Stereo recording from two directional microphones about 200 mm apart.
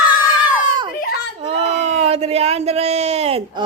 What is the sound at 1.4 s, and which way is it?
A child's voice, 30° right (ahead or behind).